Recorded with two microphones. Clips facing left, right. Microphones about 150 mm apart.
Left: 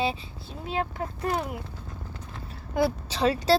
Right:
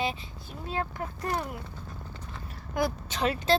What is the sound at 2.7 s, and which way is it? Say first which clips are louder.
Speech: left 4 dB; 30° left (ahead or behind).